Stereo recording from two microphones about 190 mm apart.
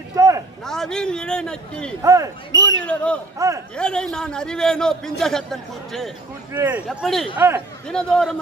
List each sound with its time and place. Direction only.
0.1 s a sound: 15° right (ahead or behind)
0.7 s a man's voice: 5° left (ahead or behind)
2.0 s speech: 15° right (ahead or behind)
2.8 s speech: 5° left (ahead or behind)
3.3 s speech: 15° right (ahead or behind)
3.7 s a man's voice: 5° left (ahead or behind)
6.5 s speech: 10° right (ahead or behind)
7.9 s a man's voice: 5° left (ahead or behind)